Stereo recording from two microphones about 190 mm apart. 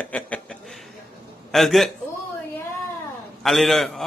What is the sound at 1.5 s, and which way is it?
Speech, centre (ahead or behind).